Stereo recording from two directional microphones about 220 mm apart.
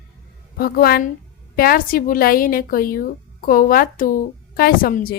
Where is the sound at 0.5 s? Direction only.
45° left (ahead or behind).